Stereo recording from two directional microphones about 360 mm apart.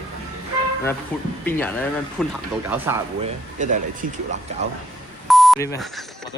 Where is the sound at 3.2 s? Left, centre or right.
Right.